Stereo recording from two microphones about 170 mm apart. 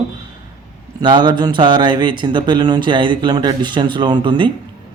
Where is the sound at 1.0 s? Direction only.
25° right (ahead or behind).